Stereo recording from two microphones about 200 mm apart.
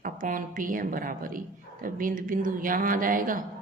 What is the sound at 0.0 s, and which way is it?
Speech, 40° right (ahead or behind).